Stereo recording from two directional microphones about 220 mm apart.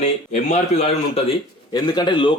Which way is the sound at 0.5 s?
30° left (ahead or behind).